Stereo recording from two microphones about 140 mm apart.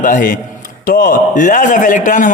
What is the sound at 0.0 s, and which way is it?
A man's voice, 70° left (ahead or behind).